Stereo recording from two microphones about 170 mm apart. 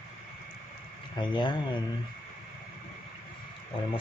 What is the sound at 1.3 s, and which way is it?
Speech, 25° left (ahead or behind).